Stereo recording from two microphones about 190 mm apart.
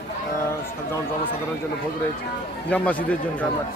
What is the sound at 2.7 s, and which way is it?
Speech, 5° left (ahead or behind).